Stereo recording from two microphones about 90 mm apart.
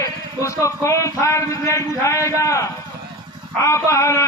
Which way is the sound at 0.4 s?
35° left (ahead or behind).